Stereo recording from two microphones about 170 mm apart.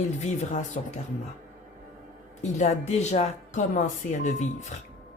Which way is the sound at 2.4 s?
45° left (ahead or behind).